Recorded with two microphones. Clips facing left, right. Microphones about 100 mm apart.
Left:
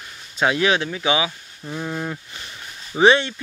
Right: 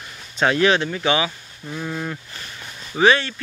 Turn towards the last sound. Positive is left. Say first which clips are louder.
# left 1 dB
turn(degrees=20)  # may be behind; listen again after turning